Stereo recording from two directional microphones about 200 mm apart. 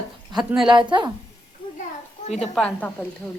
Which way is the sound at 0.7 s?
25° right (ahead or behind).